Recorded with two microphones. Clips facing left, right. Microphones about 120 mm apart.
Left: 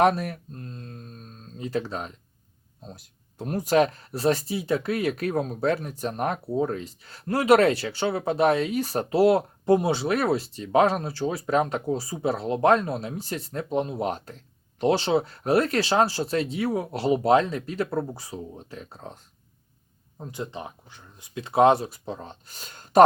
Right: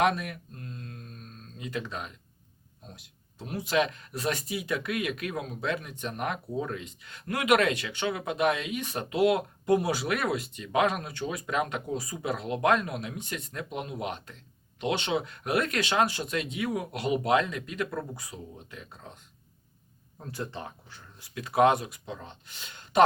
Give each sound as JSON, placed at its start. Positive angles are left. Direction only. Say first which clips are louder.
{"t": 0.0, "sound": "a sound", "louder": "left 5 dB", "side_deg": 35}
{"t": 2.8, "sound": "speech", "louder": "left 6 dB", "side_deg": 35}
{"t": 20.1, "sound": "speech", "louder": "left 3 dB", "side_deg": 20}